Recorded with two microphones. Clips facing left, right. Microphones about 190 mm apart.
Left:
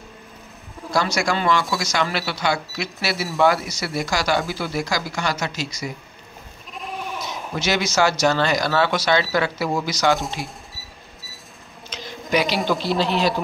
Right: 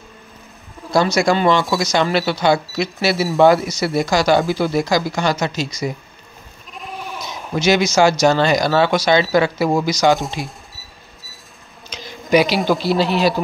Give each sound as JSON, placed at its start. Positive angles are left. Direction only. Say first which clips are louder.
{"t": 0.9, "sound": "speech", "louder": "right 6 dB", "side_deg": -20}
{"t": 6.7, "sound": "goat", "louder": "even", "side_deg": 0}
{"t": 7.2, "sound": "speech", "louder": "right 8 dB", "side_deg": -15}
{"t": 11.9, "sound": "a sound", "louder": "right 7 dB", "side_deg": -10}
{"t": 12.5, "sound": "speech", "louder": "right 4 dB", "side_deg": 0}